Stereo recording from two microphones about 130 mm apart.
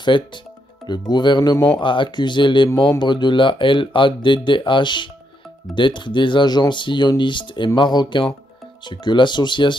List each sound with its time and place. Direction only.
0.1 s speech: 40° left (ahead or behind)